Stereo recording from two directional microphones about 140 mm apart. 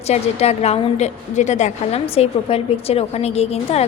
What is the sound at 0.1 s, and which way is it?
A woman's voice, 50° left (ahead or behind).